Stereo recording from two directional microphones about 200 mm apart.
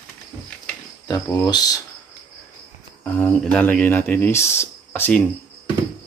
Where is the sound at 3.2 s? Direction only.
5° left (ahead or behind).